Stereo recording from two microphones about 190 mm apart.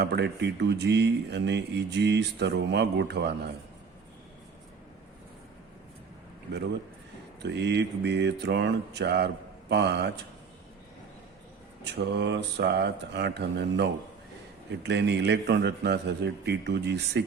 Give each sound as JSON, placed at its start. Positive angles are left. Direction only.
{"t": 0.0, "sound": "speech", "side_deg": -65}
{"t": 7.4, "sound": "speech", "side_deg": -65}
{"t": 11.9, "sound": "speech", "side_deg": -65}